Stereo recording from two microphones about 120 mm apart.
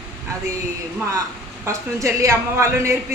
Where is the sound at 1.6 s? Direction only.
25° right (ahead or behind).